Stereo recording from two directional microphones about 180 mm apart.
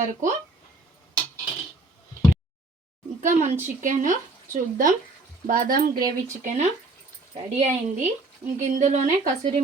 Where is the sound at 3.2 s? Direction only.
40° right (ahead or behind).